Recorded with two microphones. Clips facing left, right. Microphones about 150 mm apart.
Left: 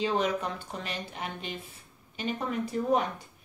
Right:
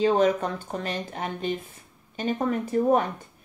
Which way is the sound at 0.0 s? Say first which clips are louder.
Right 7 dB; 45° right (ahead or behind).